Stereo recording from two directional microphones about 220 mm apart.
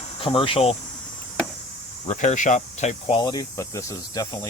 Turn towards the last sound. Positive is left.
turn(degrees=15)  # may be behind; listen again after turning